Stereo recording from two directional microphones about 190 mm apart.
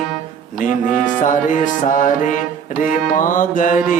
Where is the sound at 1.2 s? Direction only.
40° left (ahead or behind).